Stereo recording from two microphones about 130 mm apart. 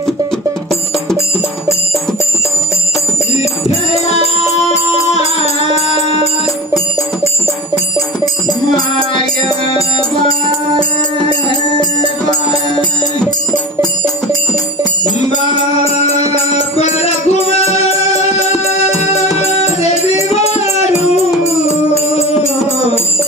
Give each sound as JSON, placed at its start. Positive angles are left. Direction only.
{"t": 4.7, "sound": "music", "side_deg": 60}
{"t": 8.5, "sound": "music", "side_deg": 30}
{"t": 13.2, "sound": "music", "side_deg": 5}
{"t": 16.7, "sound": "music", "side_deg": 55}
{"t": 19.4, "sound": "music", "side_deg": 55}